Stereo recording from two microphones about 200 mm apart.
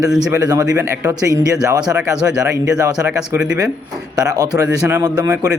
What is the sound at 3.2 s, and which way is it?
Speech, 5° right (ahead or behind).